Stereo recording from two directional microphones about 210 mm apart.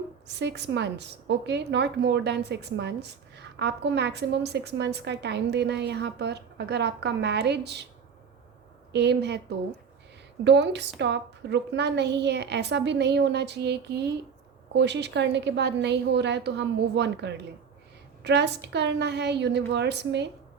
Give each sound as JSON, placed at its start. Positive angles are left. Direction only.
{"t": 0.3, "sound": "a woman's voice", "side_deg": -55}
{"t": 8.9, "sound": "a woman's voice", "side_deg": -55}
{"t": 10.4, "sound": "a woman's voice", "side_deg": -55}